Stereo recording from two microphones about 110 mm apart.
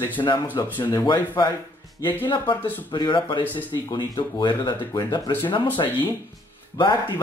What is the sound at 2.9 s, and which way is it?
Speech, 45° left (ahead or behind).